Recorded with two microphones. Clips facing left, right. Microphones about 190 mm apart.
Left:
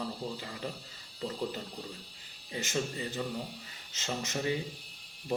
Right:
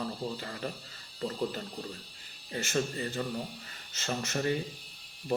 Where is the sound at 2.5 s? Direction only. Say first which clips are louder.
Right 2 dB; 15° left (ahead or behind).